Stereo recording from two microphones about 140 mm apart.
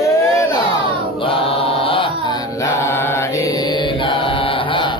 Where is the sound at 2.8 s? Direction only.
15° left (ahead or behind); by 4.9 s 35° left (ahead or behind).